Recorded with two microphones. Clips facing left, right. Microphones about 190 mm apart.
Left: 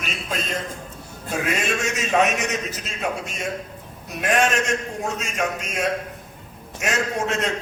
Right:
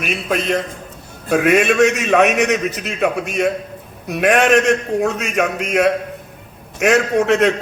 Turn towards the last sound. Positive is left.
turn(degrees=-65)  # may be behind; listen again after turning